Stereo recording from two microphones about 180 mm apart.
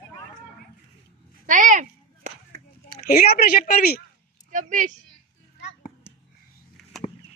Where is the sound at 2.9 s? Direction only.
55° left (ahead or behind).